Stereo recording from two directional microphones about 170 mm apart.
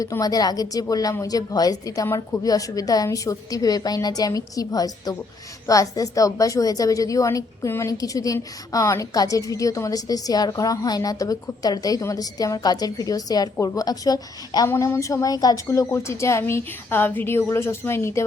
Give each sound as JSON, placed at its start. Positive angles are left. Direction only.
{"t": 0.0, "sound": "a woman's voice", "side_deg": 20}